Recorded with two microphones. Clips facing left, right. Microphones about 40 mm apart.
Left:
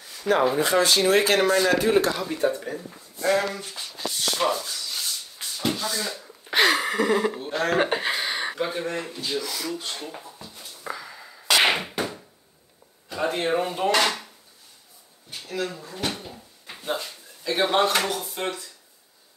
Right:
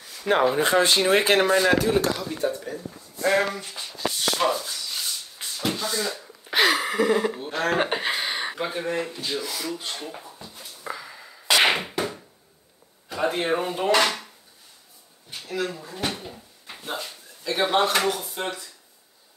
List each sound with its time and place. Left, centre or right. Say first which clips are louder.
0.3 s speech: even; centre
0.6 s speech: right 1 dB; right
3.3 s speech: right 1 dB; right
3.5 s speech: even; centre
4.4 s a sound: left 1 dB; centre
5.8 s speech: right 1 dB; centre
7.5 s a sound: left 1 dB; centre
13.1 s speech: even; centre
15.3 s speech: right 1 dB; centre